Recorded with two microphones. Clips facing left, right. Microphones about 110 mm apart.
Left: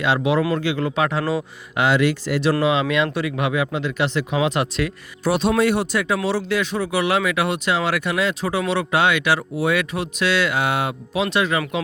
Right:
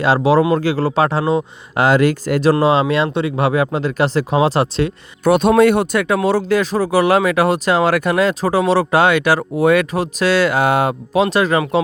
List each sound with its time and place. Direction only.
0.0 s speech: 35° right (ahead or behind)
1.7 s speech: 40° right (ahead or behind)
5.2 s speech: 55° right (ahead or behind)